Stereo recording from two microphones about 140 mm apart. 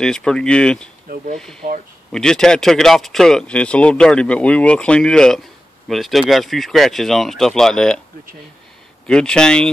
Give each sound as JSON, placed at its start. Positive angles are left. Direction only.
{"t": 0.0, "sound": "speech", "side_deg": 5}
{"t": 1.0, "sound": "speech", "side_deg": -65}
{"t": 2.1, "sound": "speech", "side_deg": 5}
{"t": 9.0, "sound": "speech", "side_deg": 5}